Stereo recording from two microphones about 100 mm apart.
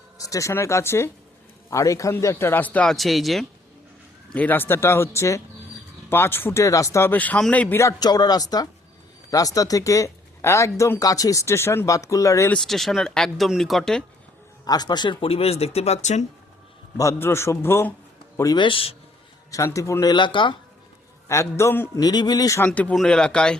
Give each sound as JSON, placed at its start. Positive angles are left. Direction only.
{"t": 0.2, "sound": "a man's voice", "side_deg": 35}
{"t": 2.9, "sound": "speech", "side_deg": 0}
{"t": 4.4, "sound": "a man's voice", "side_deg": 20}
{"t": 7.1, "sound": "speech", "side_deg": 15}
{"t": 7.8, "sound": "speech", "side_deg": 35}
{"t": 12.5, "sound": "speech", "side_deg": 0}
{"t": 14.7, "sound": "speech", "side_deg": 45}
{"t": 17.0, "sound": "a man's voice", "side_deg": 25}
{"t": 18.5, "sound": "a man's voice", "side_deg": 55}
{"t": 19.5, "sound": "speech", "side_deg": 35}
{"t": 20.1, "sound": "speech", "side_deg": 55}
{"t": 21.2, "sound": "a man's voice", "side_deg": 30}
{"t": 21.9, "sound": "speech", "side_deg": 40}
{"t": 22.7, "sound": "speech", "side_deg": 15}